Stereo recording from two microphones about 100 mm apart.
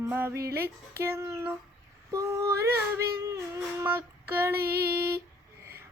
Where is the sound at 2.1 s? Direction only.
30° right (ahead or behind).